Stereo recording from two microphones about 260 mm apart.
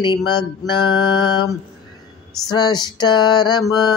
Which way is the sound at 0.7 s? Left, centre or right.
Centre.